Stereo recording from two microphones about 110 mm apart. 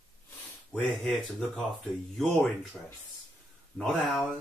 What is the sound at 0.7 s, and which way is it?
Speech, 5° left (ahead or behind).